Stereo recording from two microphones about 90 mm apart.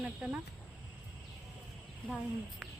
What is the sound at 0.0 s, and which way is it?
Speech, 15° right (ahead or behind).